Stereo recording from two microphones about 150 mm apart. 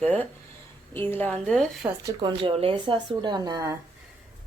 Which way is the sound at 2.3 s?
35° right (ahead or behind).